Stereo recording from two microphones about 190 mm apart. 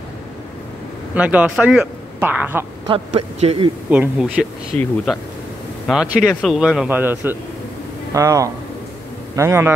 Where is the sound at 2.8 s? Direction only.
30° right (ahead or behind).